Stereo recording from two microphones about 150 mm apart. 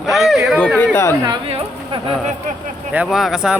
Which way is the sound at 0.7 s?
15° left (ahead or behind).